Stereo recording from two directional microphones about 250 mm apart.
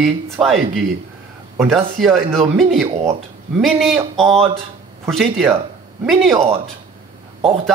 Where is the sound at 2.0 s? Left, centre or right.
Centre.